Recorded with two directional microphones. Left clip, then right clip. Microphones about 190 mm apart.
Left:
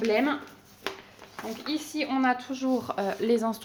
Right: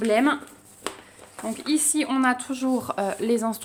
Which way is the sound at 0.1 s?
50° right (ahead or behind).